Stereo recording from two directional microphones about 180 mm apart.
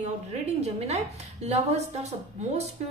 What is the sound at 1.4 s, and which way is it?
A woman's voice, 35° right (ahead or behind).